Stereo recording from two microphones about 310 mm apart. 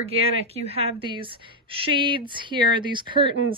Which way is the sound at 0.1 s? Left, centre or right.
Centre.